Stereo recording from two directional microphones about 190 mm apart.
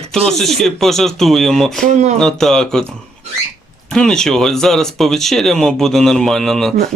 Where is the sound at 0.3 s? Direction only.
Centre (ahead or behind).